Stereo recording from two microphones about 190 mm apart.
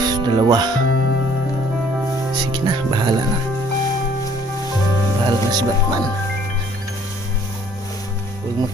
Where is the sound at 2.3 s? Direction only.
20° right (ahead or behind).